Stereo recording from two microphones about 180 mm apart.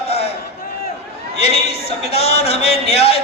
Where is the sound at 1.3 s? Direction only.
35° left (ahead or behind).